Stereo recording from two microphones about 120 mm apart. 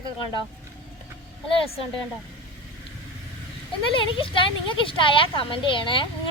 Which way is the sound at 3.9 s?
45° left (ahead or behind).